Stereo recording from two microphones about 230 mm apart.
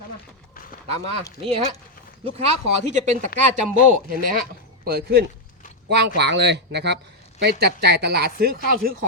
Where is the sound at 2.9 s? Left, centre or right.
Right.